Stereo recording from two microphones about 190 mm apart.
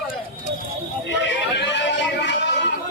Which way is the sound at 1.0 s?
65° left (ahead or behind).